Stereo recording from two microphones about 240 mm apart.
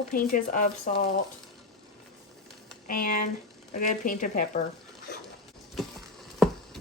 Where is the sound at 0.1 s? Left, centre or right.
Left.